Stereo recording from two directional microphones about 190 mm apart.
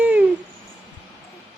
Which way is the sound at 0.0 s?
10° right (ahead or behind).